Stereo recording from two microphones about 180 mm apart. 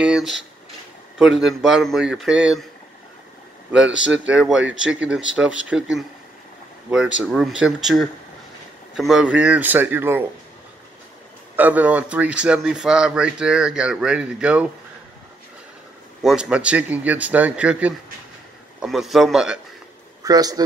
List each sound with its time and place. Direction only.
0.0 s a sound: 5° right (ahead or behind)
1.4 s speech: centre (ahead or behind)
4.3 s a man's voice: 5° right (ahead or behind)
11.5 s speech: 10° right (ahead or behind)
16.2 s a man's voice: 5° right (ahead or behind)
20.2 s speech: 20° right (ahead or behind)